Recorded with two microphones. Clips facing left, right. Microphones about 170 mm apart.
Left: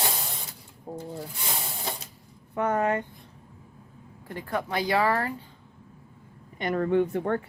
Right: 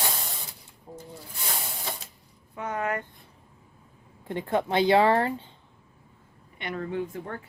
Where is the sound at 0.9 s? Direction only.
35° left (ahead or behind).